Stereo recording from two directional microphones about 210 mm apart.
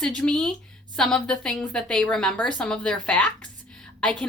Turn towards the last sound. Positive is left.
turn(degrees=5)  # may be behind; listen again after turning